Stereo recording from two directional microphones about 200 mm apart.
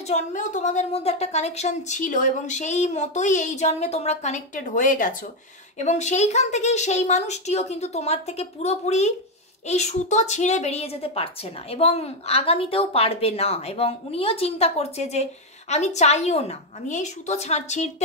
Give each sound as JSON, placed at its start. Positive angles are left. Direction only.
{"t": 0.0, "sound": "a woman's voice", "side_deg": 35}